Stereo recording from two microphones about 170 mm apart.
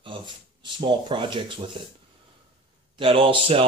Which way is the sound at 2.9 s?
30° right (ahead or behind).